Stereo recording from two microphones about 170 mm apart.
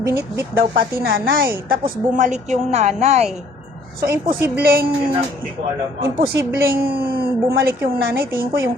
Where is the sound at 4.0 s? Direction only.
60° right (ahead or behind).